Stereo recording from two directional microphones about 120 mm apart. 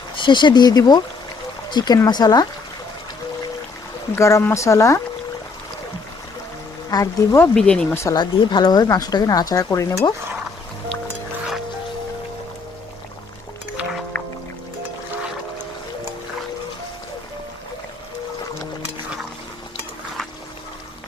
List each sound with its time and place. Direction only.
0.2 s speech: 40° left (ahead or behind)
4.1 s speech: 25° left (ahead or behind)
6.9 s speech: 30° left (ahead or behind)
7.5 s speech: 5° left (ahead or behind)
8.1 s speech: 40° left (ahead or behind)